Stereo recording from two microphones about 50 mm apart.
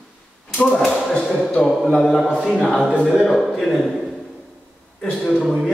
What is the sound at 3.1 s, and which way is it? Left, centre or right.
A man's voice, centre.